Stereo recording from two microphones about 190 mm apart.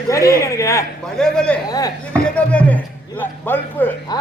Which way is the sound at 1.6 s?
20° left (ahead or behind).